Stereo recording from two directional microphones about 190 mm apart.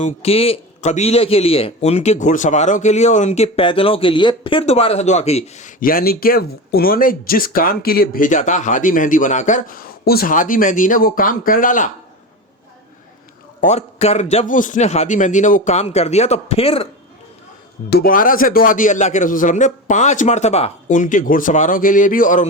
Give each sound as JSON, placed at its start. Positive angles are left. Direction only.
{"t": 0.0, "sound": "a man's voice", "side_deg": 30}
{"t": 13.6, "sound": "a man's voice", "side_deg": 35}
{"t": 17.8, "sound": "speech", "side_deg": 55}